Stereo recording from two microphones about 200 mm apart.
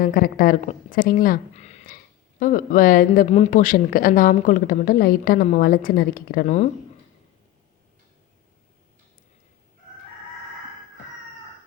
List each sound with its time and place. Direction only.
0.0 s a woman's voice: 45° left (ahead or behind)